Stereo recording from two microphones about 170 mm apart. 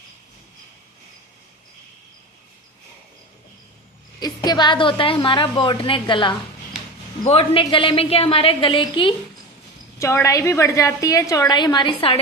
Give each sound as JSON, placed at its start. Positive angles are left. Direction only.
{"t": 4.2, "sound": "a woman's voice", "side_deg": 25}
{"t": 10.0, "sound": "a woman's voice", "side_deg": 15}